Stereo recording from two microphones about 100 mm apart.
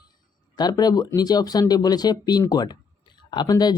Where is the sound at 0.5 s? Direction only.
40° left (ahead or behind).